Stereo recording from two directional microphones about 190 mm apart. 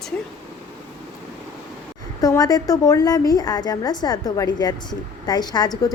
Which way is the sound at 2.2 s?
20° left (ahead or behind).